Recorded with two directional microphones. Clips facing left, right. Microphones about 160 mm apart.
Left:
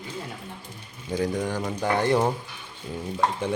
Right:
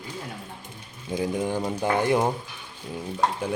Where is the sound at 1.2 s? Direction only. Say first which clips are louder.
Even; 20° right (ahead or behind).